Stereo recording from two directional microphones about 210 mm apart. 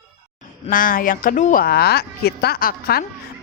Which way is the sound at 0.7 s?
40° left (ahead or behind).